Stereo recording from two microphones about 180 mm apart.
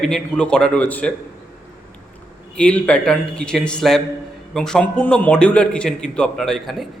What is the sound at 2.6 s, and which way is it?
A man's voice, 5° left (ahead or behind).